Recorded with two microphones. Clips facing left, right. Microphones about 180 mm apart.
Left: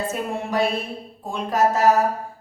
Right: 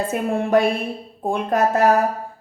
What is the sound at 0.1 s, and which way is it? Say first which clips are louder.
Speech: right 7 dB; 55° right (ahead or behind).